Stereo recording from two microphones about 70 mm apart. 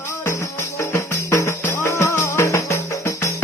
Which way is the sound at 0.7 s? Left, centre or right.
Left.